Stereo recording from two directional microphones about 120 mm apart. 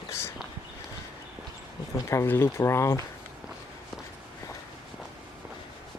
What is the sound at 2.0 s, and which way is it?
Speech, 20° left (ahead or behind).